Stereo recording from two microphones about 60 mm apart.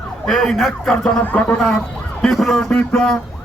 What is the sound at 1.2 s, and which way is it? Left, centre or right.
Speech, left.